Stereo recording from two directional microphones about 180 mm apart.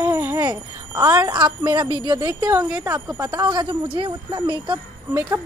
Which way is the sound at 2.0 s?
20° right (ahead or behind).